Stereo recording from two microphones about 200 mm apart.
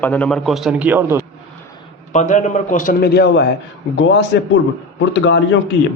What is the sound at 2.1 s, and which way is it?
A man's voice, 40° left (ahead or behind).